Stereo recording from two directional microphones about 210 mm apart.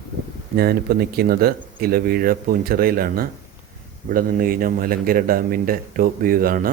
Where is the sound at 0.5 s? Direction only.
45° right (ahead or behind).